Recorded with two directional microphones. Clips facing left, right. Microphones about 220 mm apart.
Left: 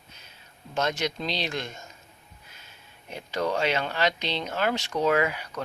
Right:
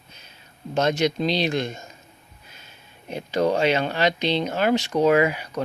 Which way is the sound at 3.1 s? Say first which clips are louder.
Right 6 dB; 20° right (ahead or behind).